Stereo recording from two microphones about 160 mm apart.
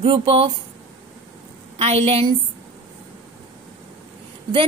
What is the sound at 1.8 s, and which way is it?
Speech, 40° right (ahead or behind).